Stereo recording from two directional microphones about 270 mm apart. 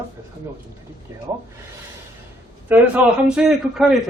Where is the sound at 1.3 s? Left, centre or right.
Centre.